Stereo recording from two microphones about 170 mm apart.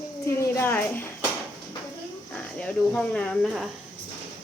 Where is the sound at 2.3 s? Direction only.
5° left (ahead or behind).